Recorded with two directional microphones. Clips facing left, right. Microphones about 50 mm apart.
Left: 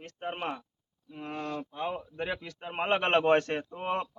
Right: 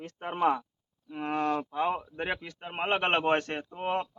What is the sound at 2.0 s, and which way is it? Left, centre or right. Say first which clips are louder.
Speech: right 1 dB; right.